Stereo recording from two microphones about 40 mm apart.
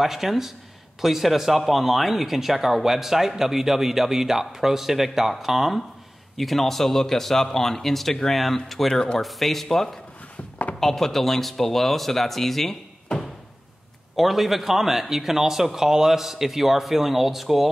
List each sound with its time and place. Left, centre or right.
0.0 s speech: centre
10.3 s a sound: left
10.8 s speech: centre
14.1 s speech: centre